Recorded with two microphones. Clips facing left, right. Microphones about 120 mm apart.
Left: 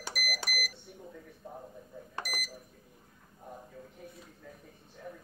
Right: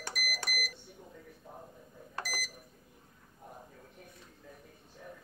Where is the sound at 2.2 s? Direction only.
15° left (ahead or behind).